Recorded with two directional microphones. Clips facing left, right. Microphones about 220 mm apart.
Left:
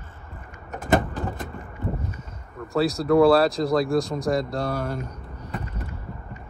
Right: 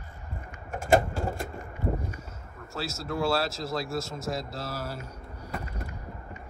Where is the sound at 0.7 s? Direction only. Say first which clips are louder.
Left 1 dB; 45° right (ahead or behind).